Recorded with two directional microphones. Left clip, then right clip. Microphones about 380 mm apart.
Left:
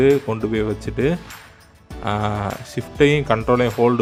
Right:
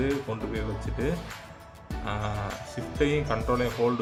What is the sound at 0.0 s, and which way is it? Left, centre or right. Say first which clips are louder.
Speech: left 13 dB; left.